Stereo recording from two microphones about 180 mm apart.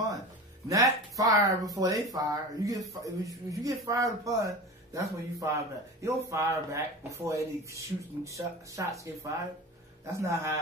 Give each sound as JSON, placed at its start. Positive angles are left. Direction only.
{"t": 0.7, "sound": "speech", "side_deg": -20}